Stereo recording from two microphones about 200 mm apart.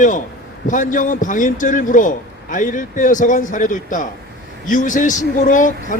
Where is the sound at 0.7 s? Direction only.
40° left (ahead or behind).